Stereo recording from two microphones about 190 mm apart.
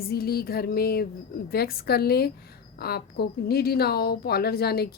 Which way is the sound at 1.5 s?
55° left (ahead or behind).